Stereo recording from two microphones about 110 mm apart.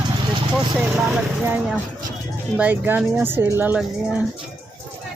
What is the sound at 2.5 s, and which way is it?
Speech, 15° right (ahead or behind).